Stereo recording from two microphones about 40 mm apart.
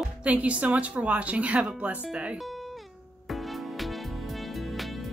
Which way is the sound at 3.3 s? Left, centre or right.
Centre.